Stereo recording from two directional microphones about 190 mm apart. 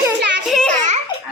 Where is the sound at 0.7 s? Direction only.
40° right (ahead or behind).